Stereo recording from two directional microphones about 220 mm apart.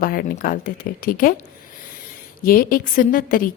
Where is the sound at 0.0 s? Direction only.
40° left (ahead or behind).